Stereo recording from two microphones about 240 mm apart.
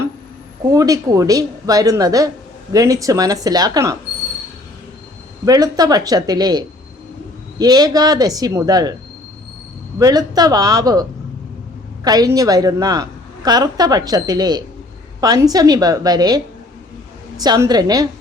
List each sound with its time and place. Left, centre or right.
0.7 s a woman's voice: centre
5.5 s a woman's voice: centre
10.0 s a woman's voice: centre
12.0 s a woman's voice: centre